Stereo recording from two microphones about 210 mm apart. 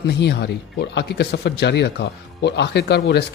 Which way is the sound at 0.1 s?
55° left (ahead or behind).